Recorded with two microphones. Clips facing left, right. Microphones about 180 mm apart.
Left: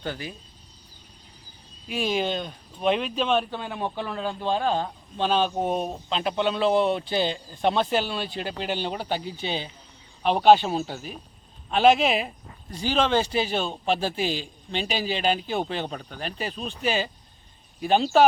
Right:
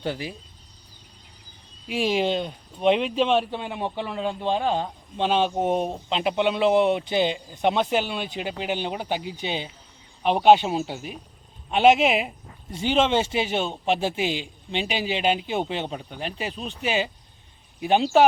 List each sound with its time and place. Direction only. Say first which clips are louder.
0.0 s speech: right 3 dB; 25° right (ahead or behind)
1.9 s a man's voice: right 3 dB; 25° right (ahead or behind)